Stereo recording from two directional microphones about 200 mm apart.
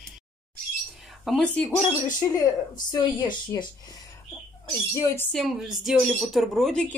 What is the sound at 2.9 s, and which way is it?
Speech, 20° left (ahead or behind).